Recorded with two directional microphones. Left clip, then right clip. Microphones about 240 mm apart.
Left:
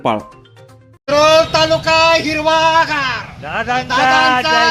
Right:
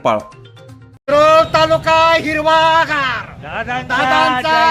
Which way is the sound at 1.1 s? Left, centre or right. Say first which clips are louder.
Right 1 dB; centre.